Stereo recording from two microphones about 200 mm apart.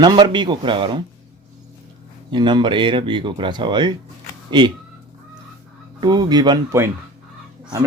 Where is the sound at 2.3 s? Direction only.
25° right (ahead or behind).